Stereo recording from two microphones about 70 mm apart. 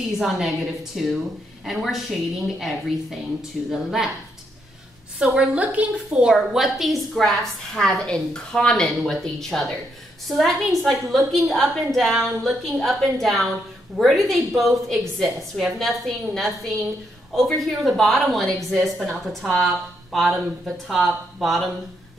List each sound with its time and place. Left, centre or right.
0.2 s a woman's voice: centre
5.2 s a woman's voice: centre
6.2 s a woman's voice: centre